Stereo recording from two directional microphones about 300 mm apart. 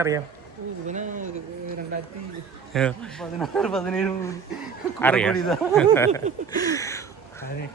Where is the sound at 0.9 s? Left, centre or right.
Right.